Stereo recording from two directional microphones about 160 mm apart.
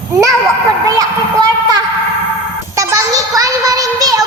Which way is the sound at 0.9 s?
25° right (ahead or behind).